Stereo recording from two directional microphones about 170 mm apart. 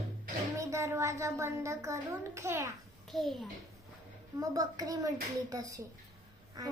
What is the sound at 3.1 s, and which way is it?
Speech, centre (ahead or behind).